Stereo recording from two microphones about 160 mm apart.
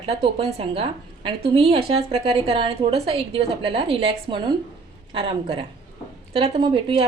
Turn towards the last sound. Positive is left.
turn(degrees=-35)  # may be behind; listen again after turning